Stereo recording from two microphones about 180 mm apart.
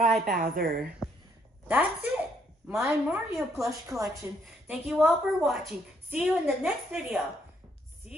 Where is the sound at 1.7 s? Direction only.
10° right (ahead or behind).